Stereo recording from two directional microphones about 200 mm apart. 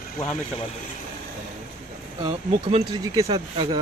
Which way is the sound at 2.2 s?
25° right (ahead or behind).